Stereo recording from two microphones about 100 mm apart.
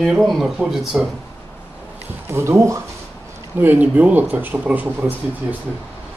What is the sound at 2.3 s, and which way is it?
Speech, 30° right (ahead or behind).